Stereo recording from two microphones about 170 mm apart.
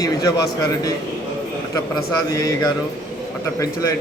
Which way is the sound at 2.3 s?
20° left (ahead or behind).